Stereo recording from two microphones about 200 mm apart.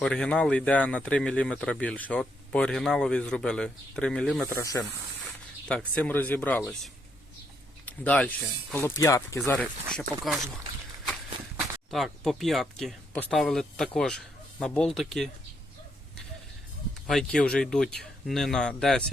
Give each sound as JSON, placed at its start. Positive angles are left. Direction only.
{"t": 0.0, "sound": "speech", "side_deg": 5}
{"t": 9.9, "sound": "speech", "side_deg": 0}
{"t": 11.6, "sound": "speech", "side_deg": 0}
{"t": 17.1, "sound": "speech", "side_deg": 5}